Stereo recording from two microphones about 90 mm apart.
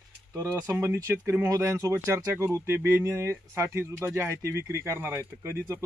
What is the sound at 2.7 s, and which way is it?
Speech, 20° right (ahead or behind).